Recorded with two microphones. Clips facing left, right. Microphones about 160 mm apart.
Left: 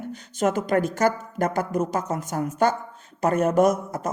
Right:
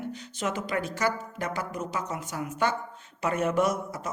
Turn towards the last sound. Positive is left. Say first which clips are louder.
# left 7 dB
turn(degrees=45)  # may be behind; listen again after turning